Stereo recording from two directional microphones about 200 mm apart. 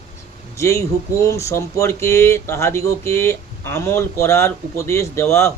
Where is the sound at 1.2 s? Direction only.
15° left (ahead or behind).